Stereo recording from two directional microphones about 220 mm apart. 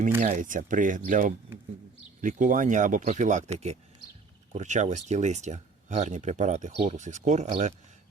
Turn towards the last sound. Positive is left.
turn(degrees=-30)  # may be behind; listen again after turning